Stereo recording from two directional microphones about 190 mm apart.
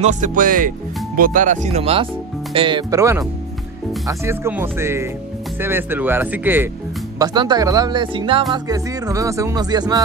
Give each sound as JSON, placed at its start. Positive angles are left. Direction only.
{"t": 0.0, "sound": "speech", "side_deg": -45}
{"t": 7.2, "sound": "speech", "side_deg": -20}